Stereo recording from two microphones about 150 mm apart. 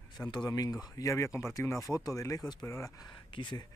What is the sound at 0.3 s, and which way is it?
Speech, 25° left (ahead or behind).